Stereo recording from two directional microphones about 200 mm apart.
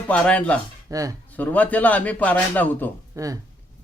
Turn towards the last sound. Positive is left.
turn(degrees=-15)  # may be behind; listen again after turning